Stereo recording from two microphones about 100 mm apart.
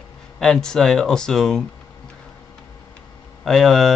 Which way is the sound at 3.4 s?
Centre (ahead or behind).